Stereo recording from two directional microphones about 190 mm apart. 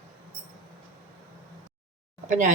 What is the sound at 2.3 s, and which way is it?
Speech, 40° right (ahead or behind).